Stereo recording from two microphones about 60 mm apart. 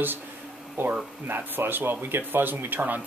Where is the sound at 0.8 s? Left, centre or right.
Right.